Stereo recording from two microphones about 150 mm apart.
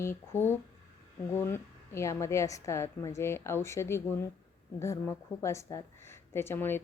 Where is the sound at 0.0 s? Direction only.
15° left (ahead or behind).